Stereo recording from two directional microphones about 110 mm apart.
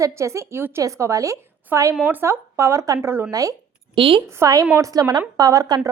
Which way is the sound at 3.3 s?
30° right (ahead or behind).